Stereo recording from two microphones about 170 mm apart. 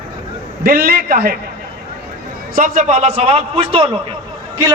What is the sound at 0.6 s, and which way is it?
Speech, 65° right (ahead or behind).